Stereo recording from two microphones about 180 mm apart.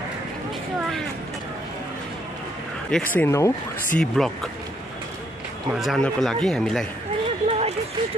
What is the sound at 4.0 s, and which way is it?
Speech, centre (ahead or behind).